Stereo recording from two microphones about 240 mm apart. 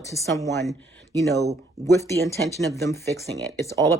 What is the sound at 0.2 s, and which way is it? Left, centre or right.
Speech, centre.